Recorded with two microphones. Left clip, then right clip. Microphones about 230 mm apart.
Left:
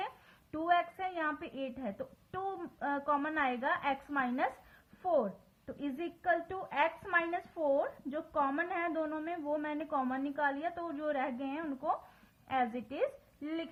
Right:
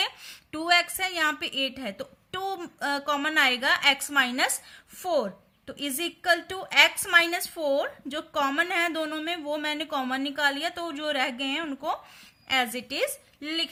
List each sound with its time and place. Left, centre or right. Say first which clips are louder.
0.5 s a woman's voice: right 8 dB; right